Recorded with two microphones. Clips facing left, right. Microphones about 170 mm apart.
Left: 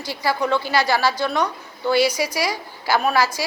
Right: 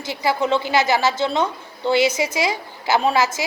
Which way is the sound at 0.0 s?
20° right (ahead or behind).